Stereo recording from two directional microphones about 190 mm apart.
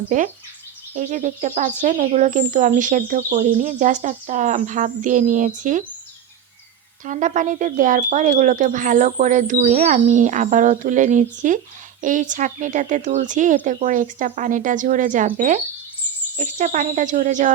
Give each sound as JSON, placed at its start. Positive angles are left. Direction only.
{"t": 0.1, "sound": "speech", "side_deg": -45}
{"t": 7.0, "sound": "speech", "side_deg": -40}